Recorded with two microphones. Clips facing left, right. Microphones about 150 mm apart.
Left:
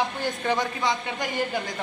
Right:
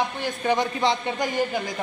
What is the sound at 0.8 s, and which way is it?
Speech, 30° right (ahead or behind).